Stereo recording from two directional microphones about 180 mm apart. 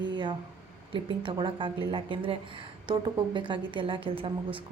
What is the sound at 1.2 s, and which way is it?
A woman's voice, 25° right (ahead or behind).